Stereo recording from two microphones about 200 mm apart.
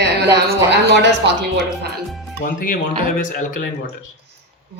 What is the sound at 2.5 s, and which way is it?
Speech, 45° left (ahead or behind).